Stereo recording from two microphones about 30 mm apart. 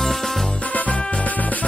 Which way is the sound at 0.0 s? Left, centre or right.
Centre.